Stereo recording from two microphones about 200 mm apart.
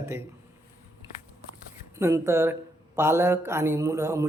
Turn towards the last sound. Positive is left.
turn(degrees=-15)  # may be behind; listen again after turning